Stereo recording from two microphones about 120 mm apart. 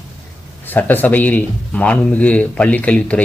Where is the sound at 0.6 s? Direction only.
15° left (ahead or behind).